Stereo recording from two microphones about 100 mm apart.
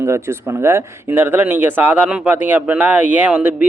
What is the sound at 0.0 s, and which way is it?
Speech, 25° right (ahead or behind).